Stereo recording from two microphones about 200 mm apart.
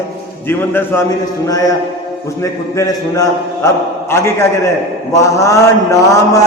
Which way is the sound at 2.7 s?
15° left (ahead or behind).